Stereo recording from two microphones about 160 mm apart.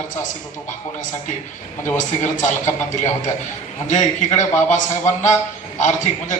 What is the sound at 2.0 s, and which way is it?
Speech, 50° left (ahead or behind).